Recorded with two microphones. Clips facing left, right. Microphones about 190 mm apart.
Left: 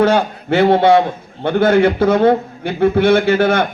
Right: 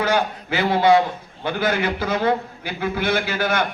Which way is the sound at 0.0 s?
60° left (ahead or behind).